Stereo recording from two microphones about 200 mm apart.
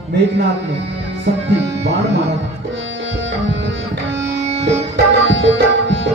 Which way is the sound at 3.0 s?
65° right (ahead or behind).